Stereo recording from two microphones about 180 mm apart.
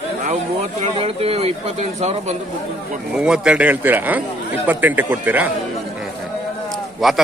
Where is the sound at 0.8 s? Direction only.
35° right (ahead or behind).